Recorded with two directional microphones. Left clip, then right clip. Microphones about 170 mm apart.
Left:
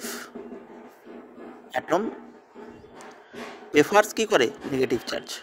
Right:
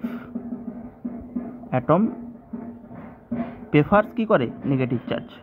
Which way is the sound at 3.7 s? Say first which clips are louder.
Even; 35° left (ahead or behind).